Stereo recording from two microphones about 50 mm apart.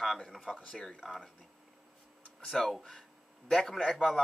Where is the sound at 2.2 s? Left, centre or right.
Centre.